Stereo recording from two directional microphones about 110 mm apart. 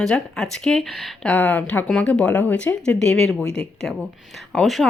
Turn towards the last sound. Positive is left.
turn(degrees=5)  # may be behind; listen again after turning